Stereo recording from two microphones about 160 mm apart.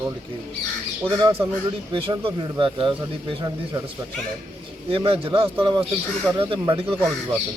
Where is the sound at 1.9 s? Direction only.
30° right (ahead or behind).